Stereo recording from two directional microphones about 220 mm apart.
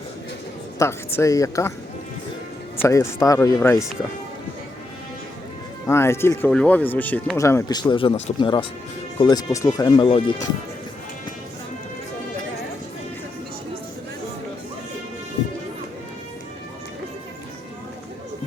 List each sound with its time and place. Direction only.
0.8 s speech: 10° left (ahead or behind)
2.8 s speech: 15° left (ahead or behind)
5.8 s speech: 10° left (ahead or behind)